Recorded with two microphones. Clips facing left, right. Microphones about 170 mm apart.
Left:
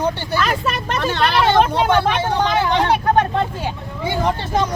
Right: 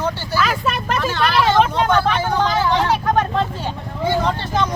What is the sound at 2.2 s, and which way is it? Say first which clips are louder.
Speech: even; 20° left (ahead or behind).